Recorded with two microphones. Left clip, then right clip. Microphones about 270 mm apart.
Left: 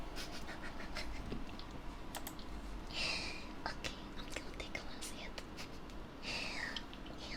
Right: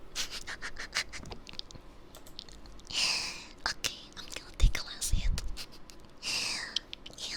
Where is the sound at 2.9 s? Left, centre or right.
Right.